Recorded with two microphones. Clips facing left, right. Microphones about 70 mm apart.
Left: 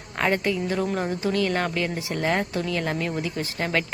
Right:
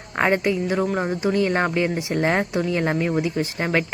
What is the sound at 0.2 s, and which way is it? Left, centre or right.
Speech, right.